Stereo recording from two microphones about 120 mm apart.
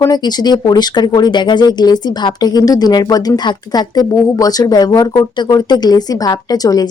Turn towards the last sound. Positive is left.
turn(degrees=30)  # may be behind; listen again after turning